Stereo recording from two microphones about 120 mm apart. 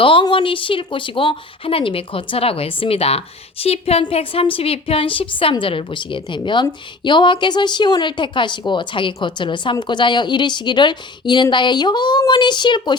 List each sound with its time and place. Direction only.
0.0 s a woman's voice: 45° left (ahead or behind)